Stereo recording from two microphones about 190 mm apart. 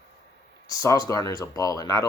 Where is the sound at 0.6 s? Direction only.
20° left (ahead or behind).